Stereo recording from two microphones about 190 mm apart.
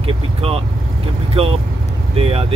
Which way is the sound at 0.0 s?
30° right (ahead or behind).